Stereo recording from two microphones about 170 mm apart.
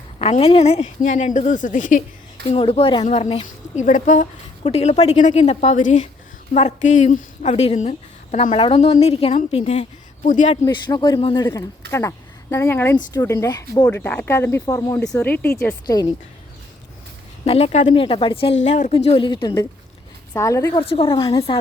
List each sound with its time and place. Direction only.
0.2 s a woman's voice: 35° left (ahead or behind)
2.5 s speech: 35° left (ahead or behind)
10.2 s a woman's voice: 50° left (ahead or behind)
10.7 s a woman's voice: 25° left (ahead or behind)
11.9 s a woman's voice: 15° left (ahead or behind)
15.2 s speech: 10° left (ahead or behind)
17.4 s speech: 35° left (ahead or behind)
18.0 s a woman's voice: 30° left (ahead or behind)
18.6 s a woman's voice: 40° left (ahead or behind); by 20.8 s 20° left (ahead or behind)
20.8 s a woman's voice: 30° left (ahead or behind)